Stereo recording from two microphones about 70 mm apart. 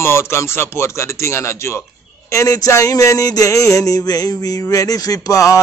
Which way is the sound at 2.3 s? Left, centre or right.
Left.